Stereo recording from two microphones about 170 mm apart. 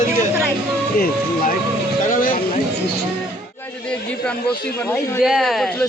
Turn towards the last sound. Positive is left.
turn(degrees=0)  # may be behind; listen again after turning